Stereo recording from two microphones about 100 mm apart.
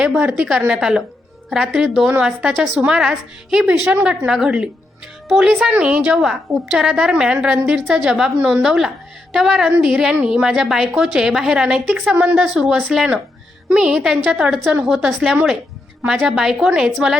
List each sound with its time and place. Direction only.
0.0 s a woman's voice: 10° right (ahead or behind)